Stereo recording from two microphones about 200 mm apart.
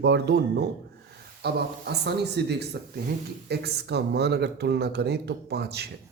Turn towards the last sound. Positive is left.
turn(degrees=-55)  # may be behind; listen again after turning